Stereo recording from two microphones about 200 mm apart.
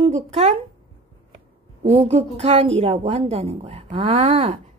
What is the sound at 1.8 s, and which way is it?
A woman's voice, 30° right (ahead or behind).